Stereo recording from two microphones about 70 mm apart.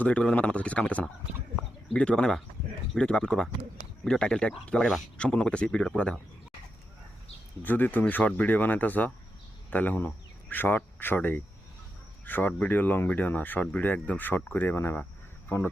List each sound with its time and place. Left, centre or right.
0.0 s a man's voice: centre
7.6 s speech: left